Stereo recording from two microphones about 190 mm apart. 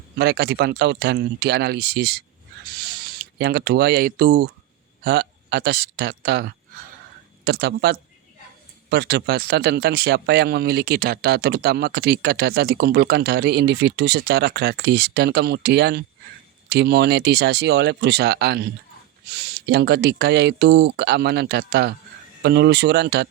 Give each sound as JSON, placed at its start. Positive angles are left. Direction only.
{"t": 0.2, "sound": "speech", "side_deg": -60}